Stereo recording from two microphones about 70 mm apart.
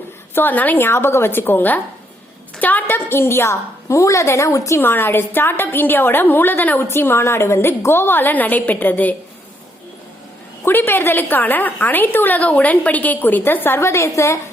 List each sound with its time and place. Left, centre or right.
0.3 s a woman's voice: left
4.8 s a woman's voice: left
10.7 s a woman's voice: left